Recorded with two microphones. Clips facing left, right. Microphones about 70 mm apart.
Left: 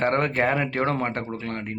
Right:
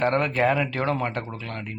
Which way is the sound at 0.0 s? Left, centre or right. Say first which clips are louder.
Even; left.